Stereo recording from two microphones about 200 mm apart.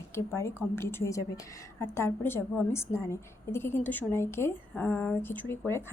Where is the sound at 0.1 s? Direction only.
15° left (ahead or behind).